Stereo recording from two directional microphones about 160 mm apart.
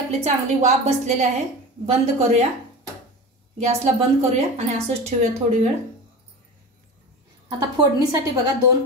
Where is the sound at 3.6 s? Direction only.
45° right (ahead or behind).